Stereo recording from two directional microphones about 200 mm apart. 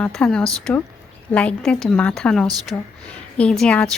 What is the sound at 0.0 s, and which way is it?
A woman's voice, 5° left (ahead or behind).